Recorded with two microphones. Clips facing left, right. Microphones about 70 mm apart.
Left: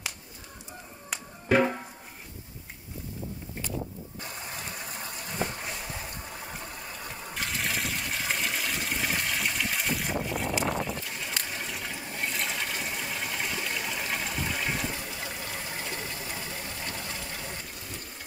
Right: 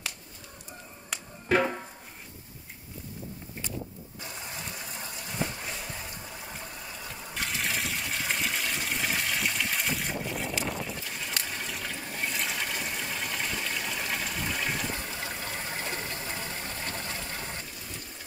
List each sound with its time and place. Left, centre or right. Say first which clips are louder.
1.1 s music: left 2 dB; centre
4.2 s rain: even; left
6.8 s a sound: left 1 dB; left
7.3 s water: even; centre
11.4 s toilet flush: even; centre
15.0 s a sound: right 1 dB; right